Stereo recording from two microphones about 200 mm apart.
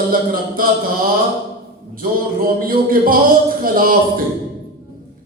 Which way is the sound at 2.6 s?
45° right (ahead or behind).